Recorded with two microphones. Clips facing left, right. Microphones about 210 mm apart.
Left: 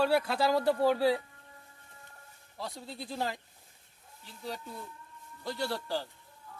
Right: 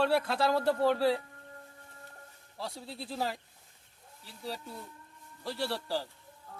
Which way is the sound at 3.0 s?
5° right (ahead or behind).